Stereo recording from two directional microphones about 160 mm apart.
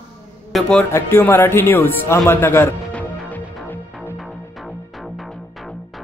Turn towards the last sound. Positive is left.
turn(degrees=0)  # may be behind; listen again after turning